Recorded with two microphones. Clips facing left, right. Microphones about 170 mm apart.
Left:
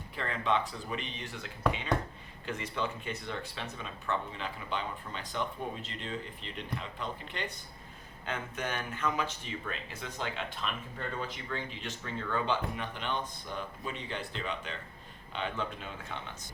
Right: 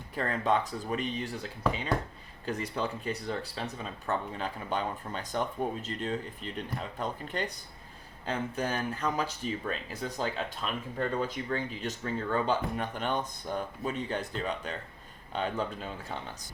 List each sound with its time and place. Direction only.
0.2 s speech: 45° right (ahead or behind)